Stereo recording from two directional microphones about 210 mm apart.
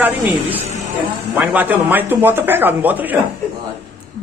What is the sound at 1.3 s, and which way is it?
Speech, 10° right (ahead or behind).